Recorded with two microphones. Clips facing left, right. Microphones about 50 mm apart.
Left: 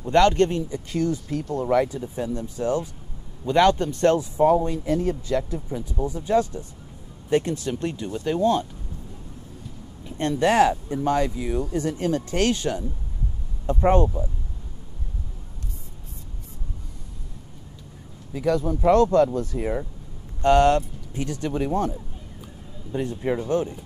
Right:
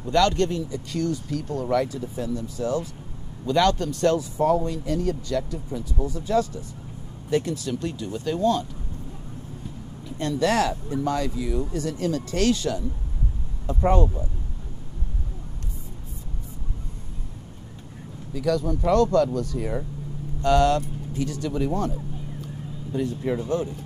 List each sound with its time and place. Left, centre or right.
0.0 s speech: left
10.0 s speech: left
13.8 s speech: left
18.3 s speech: left
22.9 s speech: left